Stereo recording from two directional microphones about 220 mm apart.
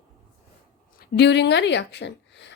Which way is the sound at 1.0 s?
50° left (ahead or behind).